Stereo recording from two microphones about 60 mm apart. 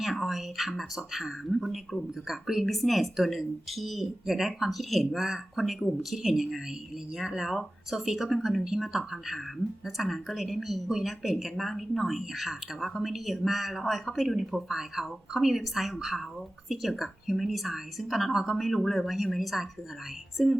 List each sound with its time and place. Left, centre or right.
0.0 s speech: centre